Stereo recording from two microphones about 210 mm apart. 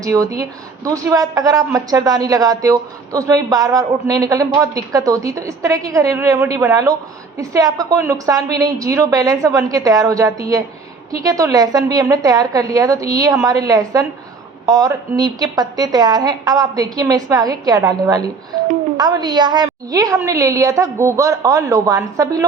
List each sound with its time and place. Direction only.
0.0 s speech: 15° right (ahead or behind)